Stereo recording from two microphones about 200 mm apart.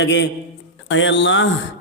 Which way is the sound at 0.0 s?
60° left (ahead or behind).